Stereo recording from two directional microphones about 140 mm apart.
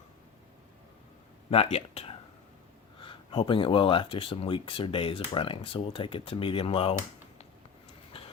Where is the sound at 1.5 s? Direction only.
45° left (ahead or behind).